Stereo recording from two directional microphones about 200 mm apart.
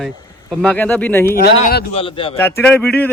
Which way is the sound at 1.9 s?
25° left (ahead or behind).